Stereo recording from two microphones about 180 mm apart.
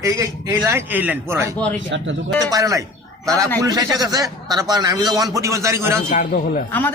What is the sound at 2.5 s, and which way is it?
A man's voice, 15° right (ahead or behind).